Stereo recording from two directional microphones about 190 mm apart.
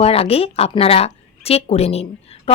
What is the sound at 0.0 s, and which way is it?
Speech, 30° left (ahead or behind).